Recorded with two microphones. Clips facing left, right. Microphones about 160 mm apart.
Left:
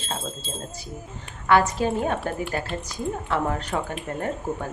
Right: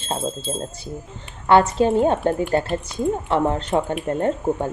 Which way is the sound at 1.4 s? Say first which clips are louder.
Right 5 dB; 25° right (ahead or behind).